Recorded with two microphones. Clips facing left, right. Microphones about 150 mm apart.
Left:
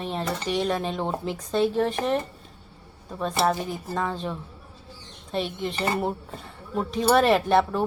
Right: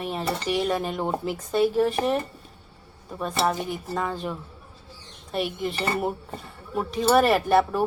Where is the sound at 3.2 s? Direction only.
Centre (ahead or behind).